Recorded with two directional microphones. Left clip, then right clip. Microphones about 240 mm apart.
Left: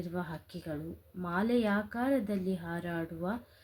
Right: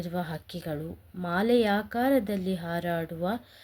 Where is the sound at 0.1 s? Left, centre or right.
Right.